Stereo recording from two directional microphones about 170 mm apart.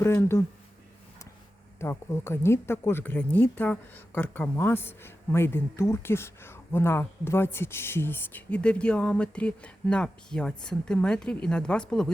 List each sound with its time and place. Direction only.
0.0 s speech: 15° left (ahead or behind)
1.8 s speech: 15° left (ahead or behind)